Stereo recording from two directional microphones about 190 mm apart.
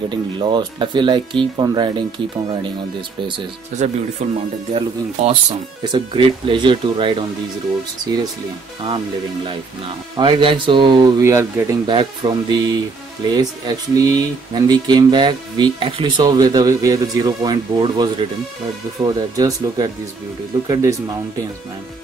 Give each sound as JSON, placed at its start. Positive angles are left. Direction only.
{"t": 0.1, "sound": "speech", "side_deg": -25}
{"t": 3.7, "sound": "speech", "side_deg": -35}
{"t": 10.1, "sound": "speech", "side_deg": -25}